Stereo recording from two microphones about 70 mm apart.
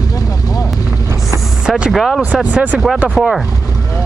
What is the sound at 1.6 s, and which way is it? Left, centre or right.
Speech, centre.